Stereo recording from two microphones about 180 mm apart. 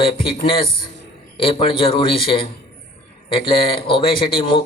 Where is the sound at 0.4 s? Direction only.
30° left (ahead or behind).